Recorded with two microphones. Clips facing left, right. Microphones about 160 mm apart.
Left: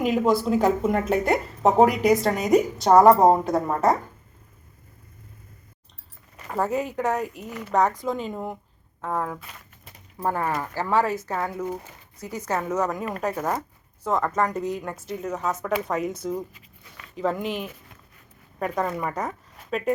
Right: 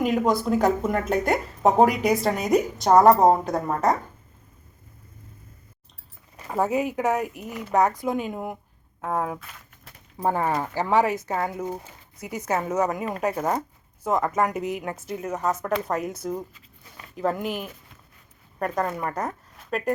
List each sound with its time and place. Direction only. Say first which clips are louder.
0.3 s speech: left 2 dB; 5° left (ahead or behind)
6.3 s speech: right 1 dB; 10° right (ahead or behind)